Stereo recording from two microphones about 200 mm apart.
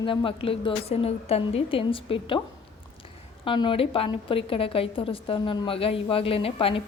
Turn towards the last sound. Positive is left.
turn(degrees=25)  # may be behind; listen again after turning